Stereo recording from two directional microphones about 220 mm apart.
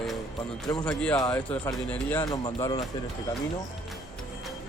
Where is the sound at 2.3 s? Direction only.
20° left (ahead or behind).